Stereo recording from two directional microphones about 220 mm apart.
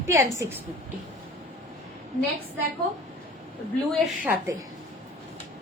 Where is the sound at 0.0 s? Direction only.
15° right (ahead or behind).